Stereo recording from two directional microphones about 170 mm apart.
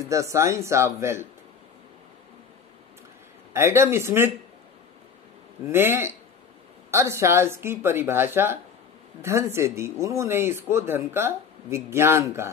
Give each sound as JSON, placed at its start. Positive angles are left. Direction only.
{"t": 0.1, "sound": "speech", "side_deg": -20}
{"t": 3.5, "sound": "speech", "side_deg": -15}
{"t": 5.7, "sound": "speech", "side_deg": -15}